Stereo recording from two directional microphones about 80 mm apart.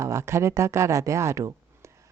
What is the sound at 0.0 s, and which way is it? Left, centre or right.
Speech, right.